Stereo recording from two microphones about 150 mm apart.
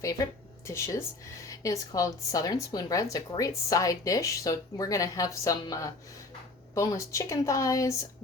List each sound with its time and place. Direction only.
0.6 s a woman's voice: 20° left (ahead or behind)